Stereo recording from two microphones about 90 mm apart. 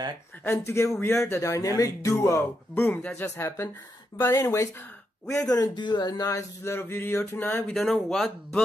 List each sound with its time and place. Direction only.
0.4 s speech: 25° left (ahead or behind)
5.2 s speech: 10° left (ahead or behind)
5.5 s speech: 50° left (ahead or behind)
6.2 s speech: 35° left (ahead or behind)
7.7 s speech: 5° left (ahead or behind)